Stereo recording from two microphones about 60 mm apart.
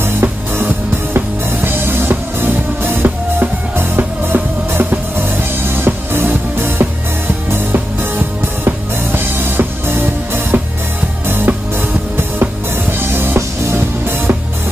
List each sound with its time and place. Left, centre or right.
0.0 s music: right
13.0 s music: right